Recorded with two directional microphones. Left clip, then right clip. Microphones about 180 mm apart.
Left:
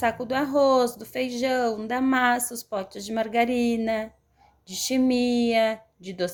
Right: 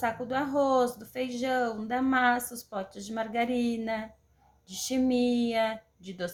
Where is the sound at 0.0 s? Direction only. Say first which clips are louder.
Left 5 dB; 45° left (ahead or behind).